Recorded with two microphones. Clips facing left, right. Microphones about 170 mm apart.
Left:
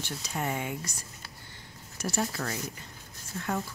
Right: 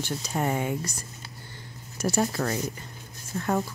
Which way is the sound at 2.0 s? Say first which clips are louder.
Right 6 dB; 40° right (ahead or behind).